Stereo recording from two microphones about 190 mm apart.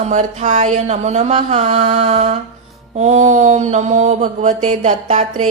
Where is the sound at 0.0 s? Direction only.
40° right (ahead or behind).